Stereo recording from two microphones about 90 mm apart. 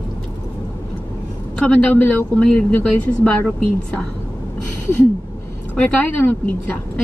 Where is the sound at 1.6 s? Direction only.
15° left (ahead or behind).